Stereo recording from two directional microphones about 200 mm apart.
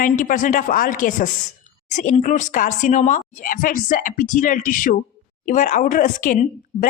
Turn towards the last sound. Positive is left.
turn(degrees=40)  # may be behind; listen again after turning